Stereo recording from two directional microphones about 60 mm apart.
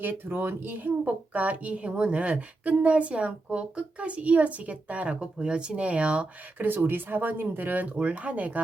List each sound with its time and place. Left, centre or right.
0.0 s a woman's voice: right
6.7 s speech: right